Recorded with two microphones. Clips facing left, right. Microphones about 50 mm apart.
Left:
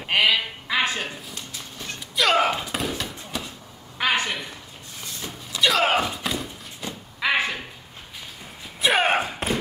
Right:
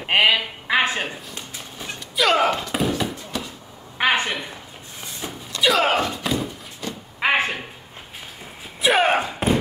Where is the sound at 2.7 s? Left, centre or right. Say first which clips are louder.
Right 5 dB; centre.